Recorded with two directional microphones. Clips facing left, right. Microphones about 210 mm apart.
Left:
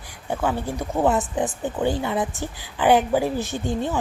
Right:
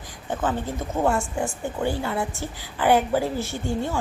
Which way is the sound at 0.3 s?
10° left (ahead or behind).